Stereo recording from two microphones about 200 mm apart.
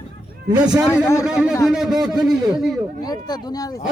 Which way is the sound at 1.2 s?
5° right (ahead or behind).